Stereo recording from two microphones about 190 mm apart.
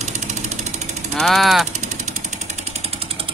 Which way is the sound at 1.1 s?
Centre (ahead or behind).